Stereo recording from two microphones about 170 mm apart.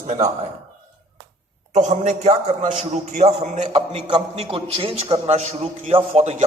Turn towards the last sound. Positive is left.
turn(degrees=-35)  # may be behind; listen again after turning